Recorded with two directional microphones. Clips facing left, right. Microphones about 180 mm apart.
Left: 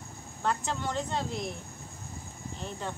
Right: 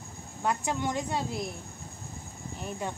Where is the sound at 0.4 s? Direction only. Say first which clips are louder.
Right 2 dB; 15° right (ahead or behind).